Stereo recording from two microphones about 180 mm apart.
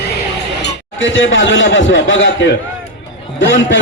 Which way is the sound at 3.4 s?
90° left.